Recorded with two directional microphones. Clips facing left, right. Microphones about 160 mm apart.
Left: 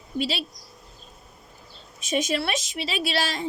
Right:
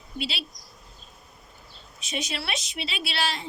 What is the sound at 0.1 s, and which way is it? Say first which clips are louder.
Speech: left 6 dB; 40° left (ahead or behind).